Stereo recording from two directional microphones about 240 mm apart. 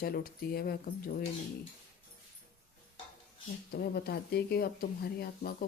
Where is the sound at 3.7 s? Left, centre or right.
Left.